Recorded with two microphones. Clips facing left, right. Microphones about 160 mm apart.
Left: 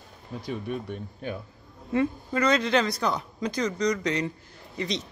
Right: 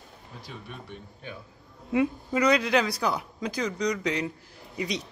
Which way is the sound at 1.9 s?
10° right (ahead or behind).